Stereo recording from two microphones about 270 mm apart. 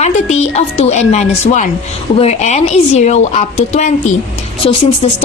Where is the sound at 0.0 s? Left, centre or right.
Left.